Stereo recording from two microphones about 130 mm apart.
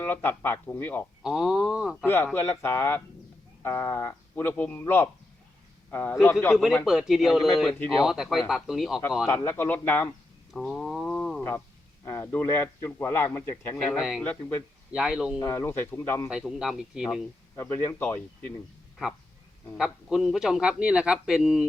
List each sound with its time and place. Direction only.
0.0 s speech: 15° left (ahead or behind)
1.2 s speech: 5° right (ahead or behind)
2.0 s speech: 15° left (ahead or behind)
6.5 s speech: centre (ahead or behind)
9.2 s speech: 20° left (ahead or behind)
10.5 s a sound: 5° left (ahead or behind)
12.0 s a man's voice: 20° left (ahead or behind)
14.9 s speech: 5° right (ahead or behind)
15.4 s speech: 20° left (ahead or behind)
16.3 s speech: 5° right (ahead or behind)
17.5 s a man's voice: 20° left (ahead or behind)
19.7 s speech: 5° right (ahead or behind)